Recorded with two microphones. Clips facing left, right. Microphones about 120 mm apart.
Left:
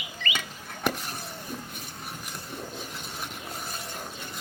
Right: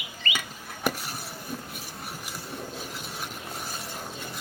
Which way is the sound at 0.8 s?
5° right (ahead or behind).